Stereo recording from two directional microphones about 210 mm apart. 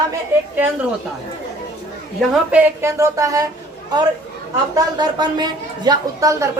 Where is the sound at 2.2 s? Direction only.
5° right (ahead or behind).